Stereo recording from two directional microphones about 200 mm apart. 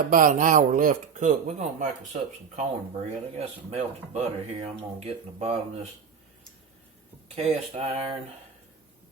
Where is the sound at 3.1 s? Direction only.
30° right (ahead or behind).